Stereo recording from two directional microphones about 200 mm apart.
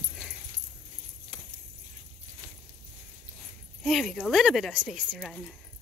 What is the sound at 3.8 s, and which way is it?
Speech, centre (ahead or behind).